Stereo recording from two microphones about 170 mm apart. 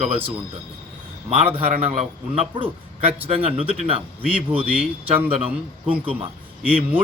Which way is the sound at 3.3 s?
35° right (ahead or behind).